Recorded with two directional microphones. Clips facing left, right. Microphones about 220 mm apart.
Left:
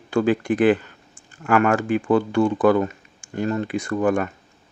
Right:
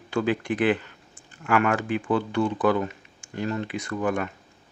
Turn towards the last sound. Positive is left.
turn(degrees=50)  # may be behind; listen again after turning